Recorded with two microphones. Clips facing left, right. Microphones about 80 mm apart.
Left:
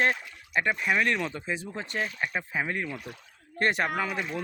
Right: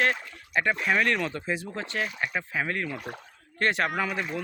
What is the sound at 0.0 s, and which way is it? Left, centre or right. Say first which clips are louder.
Speech: even; centre.